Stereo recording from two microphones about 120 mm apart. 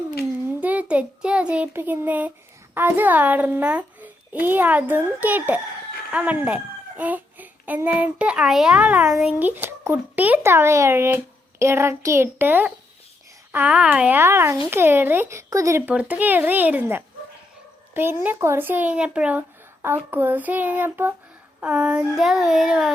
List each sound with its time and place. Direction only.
0.6 s a sound: 10° right (ahead or behind)
2.7 s a child's voice: 15° right (ahead or behind)
15.9 s a child's voice: 15° right (ahead or behind)
21.6 s child singing: 10° right (ahead or behind)